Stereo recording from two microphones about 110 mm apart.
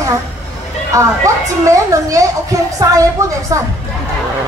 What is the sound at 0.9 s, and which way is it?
A woman's voice, 30° right (ahead or behind).